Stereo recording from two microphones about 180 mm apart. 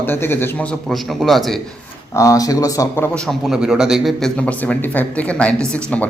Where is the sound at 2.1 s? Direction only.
20° left (ahead or behind).